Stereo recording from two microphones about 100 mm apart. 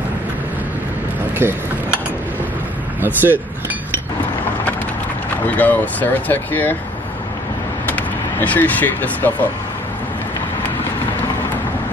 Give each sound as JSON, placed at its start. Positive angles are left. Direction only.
{"t": 1.4, "sound": "speech", "side_deg": -20}
{"t": 3.0, "sound": "speech", "side_deg": -20}
{"t": 5.5, "sound": "speech", "side_deg": 15}
{"t": 7.8, "sound": "speech", "side_deg": 15}